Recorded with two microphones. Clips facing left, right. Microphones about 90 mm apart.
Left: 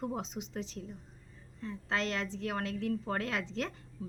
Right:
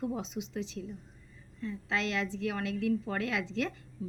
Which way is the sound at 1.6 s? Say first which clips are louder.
Right 1 dB; 35° left (ahead or behind).